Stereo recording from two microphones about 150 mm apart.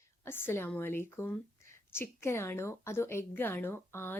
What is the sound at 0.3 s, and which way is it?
Speech, 15° left (ahead or behind).